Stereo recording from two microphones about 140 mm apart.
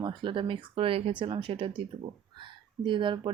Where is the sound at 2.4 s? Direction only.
35° right (ahead or behind).